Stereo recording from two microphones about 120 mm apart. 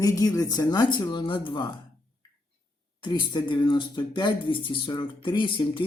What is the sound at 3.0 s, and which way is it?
Speech, 40° left (ahead or behind).